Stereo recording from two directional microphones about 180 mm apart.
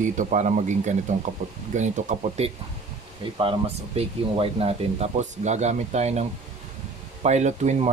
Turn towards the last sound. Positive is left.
turn(degrees=-40)  # may be behind; listen again after turning